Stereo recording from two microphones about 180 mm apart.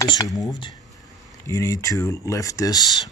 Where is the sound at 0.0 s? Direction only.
20° left (ahead or behind).